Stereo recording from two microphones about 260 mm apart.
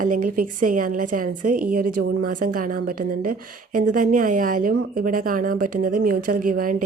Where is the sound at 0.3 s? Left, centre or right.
Right.